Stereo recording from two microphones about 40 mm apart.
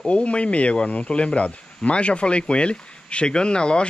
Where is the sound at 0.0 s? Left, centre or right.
Left.